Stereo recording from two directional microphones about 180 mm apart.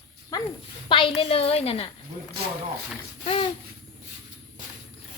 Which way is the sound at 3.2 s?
35° left (ahead or behind).